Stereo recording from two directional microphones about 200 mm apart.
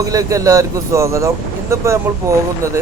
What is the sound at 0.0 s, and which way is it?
Speech, 15° right (ahead or behind).